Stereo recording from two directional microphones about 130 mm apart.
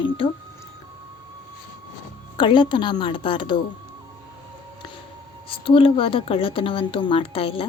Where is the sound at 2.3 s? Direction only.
35° left (ahead or behind).